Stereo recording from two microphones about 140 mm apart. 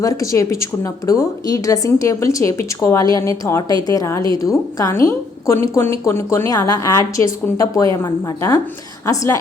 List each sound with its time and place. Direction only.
0.0 s a woman's voice: 25° left (ahead or behind)